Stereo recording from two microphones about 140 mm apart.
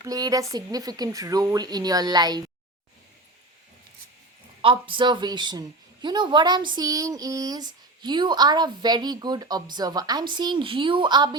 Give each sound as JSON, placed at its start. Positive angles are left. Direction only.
{"t": 0.0, "sound": "a woman's voice", "side_deg": -25}
{"t": 4.6, "sound": "a woman's voice", "side_deg": -35}